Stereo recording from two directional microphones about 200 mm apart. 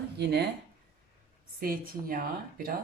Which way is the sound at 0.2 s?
55° right (ahead or behind).